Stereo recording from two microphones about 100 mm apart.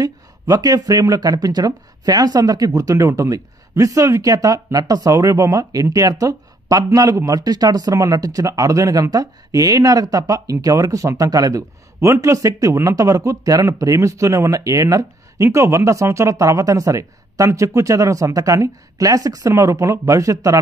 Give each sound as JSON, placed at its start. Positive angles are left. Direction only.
{"t": 0.0, "sound": "speech", "side_deg": -40}